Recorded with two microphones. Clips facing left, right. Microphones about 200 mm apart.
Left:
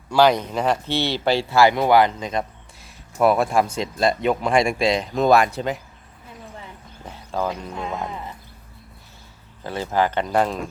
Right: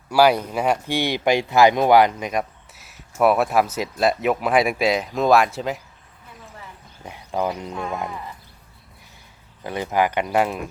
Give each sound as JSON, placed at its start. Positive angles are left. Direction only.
{"t": 0.1, "sound": "speech", "side_deg": -10}
{"t": 7.1, "sound": "clip-clop", "side_deg": -15}
{"t": 7.8, "sound": "speech", "side_deg": 20}
{"t": 9.6, "sound": "speech", "side_deg": -15}